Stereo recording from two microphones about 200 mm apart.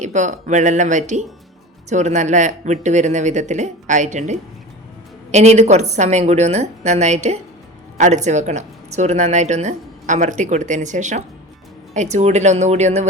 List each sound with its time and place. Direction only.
0.0 s a woman's voice: 35° right (ahead or behind)